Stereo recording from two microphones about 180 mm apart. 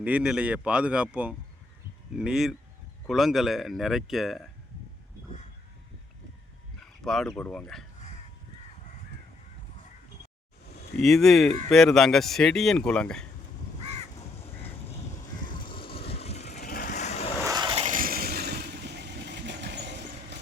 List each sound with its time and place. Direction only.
0.0 s speech: 5° right (ahead or behind)
7.0 s speech: centre (ahead or behind)
10.9 s speech: centre (ahead or behind)
14.2 s crow: 35° left (ahead or behind)
15.6 s a sound: 30° left (ahead or behind)
16.5 s vehicle: 60° left (ahead or behind); by 17.3 s 40° left (ahead or behind)
17.4 s vehicle: 20° right (ahead or behind)
17.8 s vehicle: 50° right (ahead or behind); by 20.0 s 70° right (ahead or behind)